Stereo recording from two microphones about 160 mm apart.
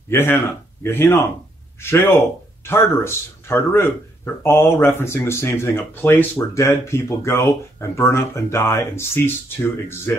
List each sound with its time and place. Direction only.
0.1 s speech: 15° left (ahead or behind)